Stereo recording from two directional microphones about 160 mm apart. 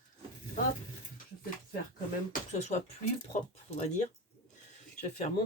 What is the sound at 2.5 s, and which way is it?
Speech, 45° left (ahead or behind).